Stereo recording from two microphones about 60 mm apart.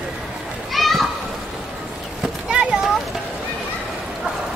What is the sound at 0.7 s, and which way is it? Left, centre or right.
Children playing, centre.